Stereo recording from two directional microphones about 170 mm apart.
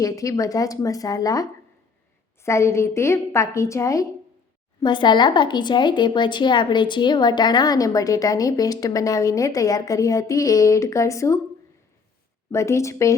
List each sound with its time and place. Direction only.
0.0 s a woman's voice: 20° left (ahead or behind)
12.5 s a woman's voice: 15° left (ahead or behind)